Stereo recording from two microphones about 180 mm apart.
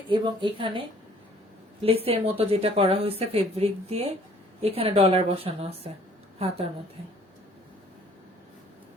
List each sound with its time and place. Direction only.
0.1 s a woman's voice: 25° right (ahead or behind)